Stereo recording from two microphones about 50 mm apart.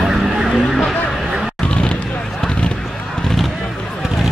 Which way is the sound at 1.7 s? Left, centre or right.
Centre.